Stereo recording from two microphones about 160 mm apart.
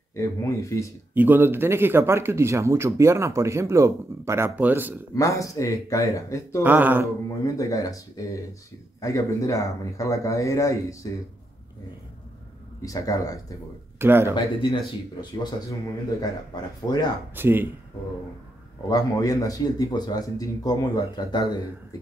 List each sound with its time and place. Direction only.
0.2 s speech: 20° left (ahead or behind)
1.1 s speech: 10° right (ahead or behind)
5.1 s speech: 20° left (ahead or behind)
6.6 s speech: 10° right (ahead or behind)
7.4 s speech: 20° left (ahead or behind)
12.8 s speech: 20° left (ahead or behind)
13.9 s speech: 15° right (ahead or behind)
14.3 s speech: 30° left (ahead or behind)
16.8 s speech: 25° left (ahead or behind)
17.4 s speech: 10° right (ahead or behind)
18.9 s speech: 20° left (ahead or behind)